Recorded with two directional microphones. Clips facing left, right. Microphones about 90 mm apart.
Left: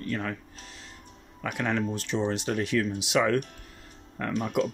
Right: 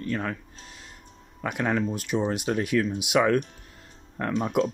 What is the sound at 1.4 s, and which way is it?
Speech, 20° right (ahead or behind).